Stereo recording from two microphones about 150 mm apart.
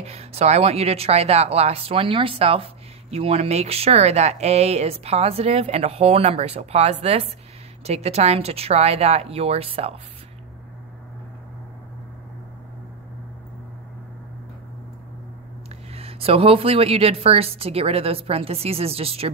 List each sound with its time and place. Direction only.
0.0 s speech: 45° right (ahead or behind)
15.9 s a woman's voice: 40° right (ahead or behind)